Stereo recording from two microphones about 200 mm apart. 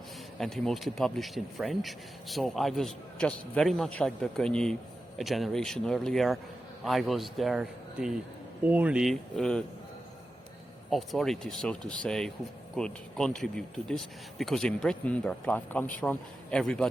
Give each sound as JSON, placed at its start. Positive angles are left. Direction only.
{"t": 0.3, "sound": "speech", "side_deg": 0}
{"t": 10.8, "sound": "speech", "side_deg": 0}